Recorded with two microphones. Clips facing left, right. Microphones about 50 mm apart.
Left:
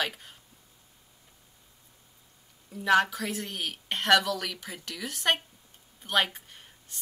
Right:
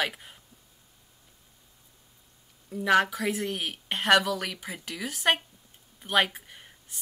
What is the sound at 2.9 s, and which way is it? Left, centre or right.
Speech, centre.